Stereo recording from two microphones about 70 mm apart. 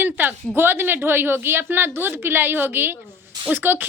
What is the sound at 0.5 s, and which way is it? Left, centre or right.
A woman's voice, right.